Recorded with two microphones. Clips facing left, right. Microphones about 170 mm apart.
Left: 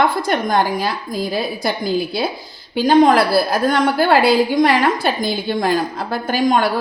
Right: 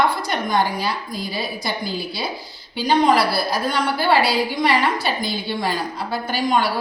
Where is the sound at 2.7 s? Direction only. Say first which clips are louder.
Left 5 dB; 50° left (ahead or behind).